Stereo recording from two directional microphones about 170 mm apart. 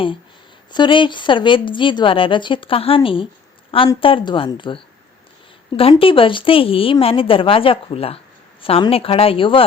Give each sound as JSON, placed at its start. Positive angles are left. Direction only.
{"t": 0.7, "sound": "a woman's voice", "side_deg": 30}
{"t": 5.9, "sound": "a woman's voice", "side_deg": 30}